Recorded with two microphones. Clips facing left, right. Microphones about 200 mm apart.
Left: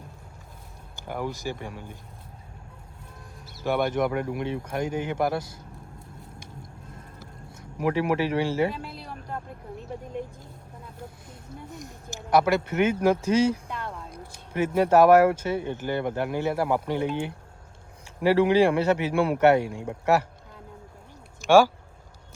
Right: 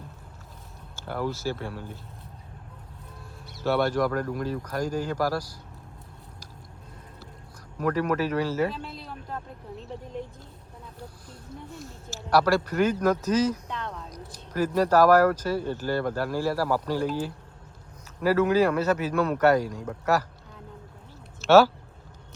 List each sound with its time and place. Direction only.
0.9 s speech: 15° left (ahead or behind)
3.6 s speech: 15° left (ahead or behind)
7.2 s speech: 25° left (ahead or behind)
8.7 s a sound: 5° left (ahead or behind)
11.7 s speech: 15° left (ahead or behind)
13.7 s a sound: 10° left (ahead or behind)
14.1 s speech: 25° left (ahead or behind)
21.4 s speech: 10° left (ahead or behind)